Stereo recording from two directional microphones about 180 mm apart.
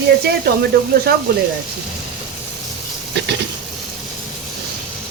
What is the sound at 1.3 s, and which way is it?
Speech, 65° right (ahead or behind).